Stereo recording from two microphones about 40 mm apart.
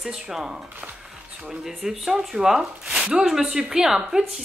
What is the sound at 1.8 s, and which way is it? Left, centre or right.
A woman's voice, centre.